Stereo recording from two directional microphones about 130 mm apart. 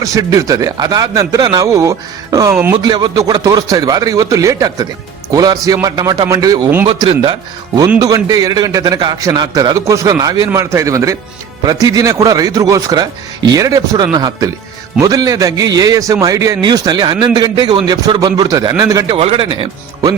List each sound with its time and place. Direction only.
0.0 s a man's voice: 25° right (ahead or behind)
2.7 s a man's voice: 35° right (ahead or behind)
6.8 s speech: 45° right (ahead or behind)
7.9 s a man's voice: 30° right (ahead or behind)
19.1 s speech: 45° right (ahead or behind)